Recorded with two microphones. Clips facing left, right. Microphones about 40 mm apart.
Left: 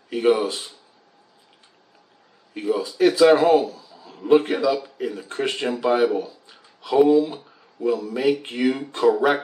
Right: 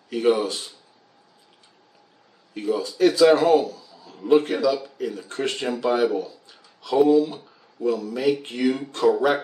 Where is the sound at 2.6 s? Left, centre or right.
Centre.